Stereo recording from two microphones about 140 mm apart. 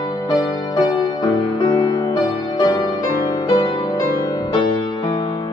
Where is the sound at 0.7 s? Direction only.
30° left (ahead or behind).